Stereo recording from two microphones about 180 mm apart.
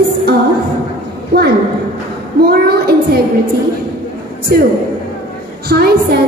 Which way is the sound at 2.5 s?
60° right (ahead or behind).